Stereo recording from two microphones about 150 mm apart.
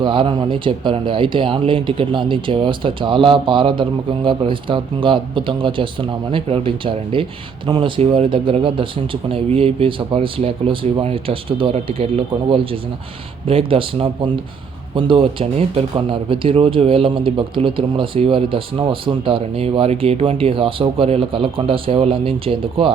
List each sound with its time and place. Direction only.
0.0 s speech: 35° right (ahead or behind)